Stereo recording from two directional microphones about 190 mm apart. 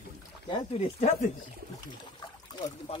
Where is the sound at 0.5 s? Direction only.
25° left (ahead or behind).